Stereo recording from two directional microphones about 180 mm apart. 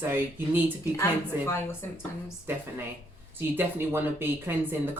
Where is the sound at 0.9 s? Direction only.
15° left (ahead or behind).